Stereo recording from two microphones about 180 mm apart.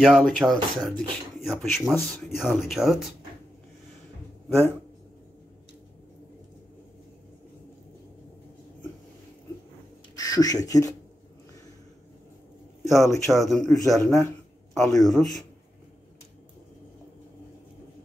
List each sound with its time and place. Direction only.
0.0 s speech: centre (ahead or behind)
10.1 s speech: 20° left (ahead or behind)
12.8 s a man's voice: 15° left (ahead or behind)
13.3 s speech: centre (ahead or behind)